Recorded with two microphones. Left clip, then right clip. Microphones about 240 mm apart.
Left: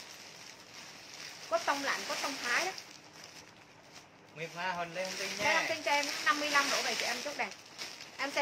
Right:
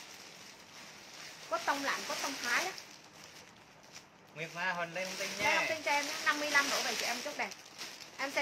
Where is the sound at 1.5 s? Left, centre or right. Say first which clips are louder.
Left 4 dB; centre.